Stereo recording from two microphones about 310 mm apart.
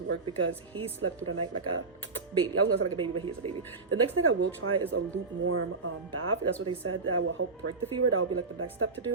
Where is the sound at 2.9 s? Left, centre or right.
Centre.